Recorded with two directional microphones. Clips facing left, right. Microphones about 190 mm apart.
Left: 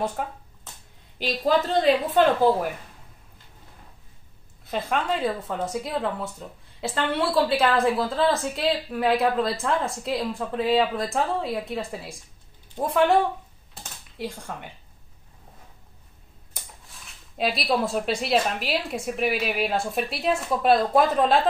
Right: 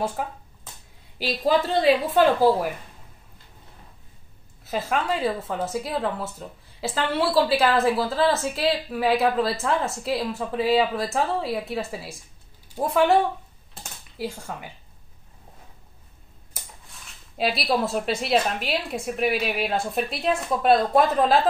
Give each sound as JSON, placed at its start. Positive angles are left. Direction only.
{"t": 0.2, "sound": "a woman's voice", "side_deg": -5}
{"t": 4.6, "sound": "a woman's voice", "side_deg": -5}
{"t": 14.1, "sound": "a woman's voice", "side_deg": -5}
{"t": 16.5, "sound": "a woman's voice", "side_deg": 0}